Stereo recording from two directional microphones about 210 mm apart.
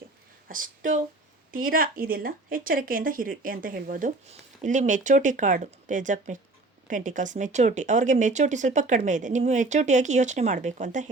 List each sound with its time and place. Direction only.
0.4 s speech: 40° right (ahead or behind)